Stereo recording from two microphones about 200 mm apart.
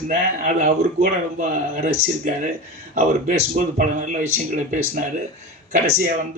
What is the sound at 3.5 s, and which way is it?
Speech, 40° right (ahead or behind).